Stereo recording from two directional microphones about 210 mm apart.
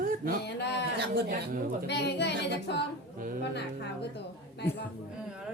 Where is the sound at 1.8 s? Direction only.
55° left (ahead or behind).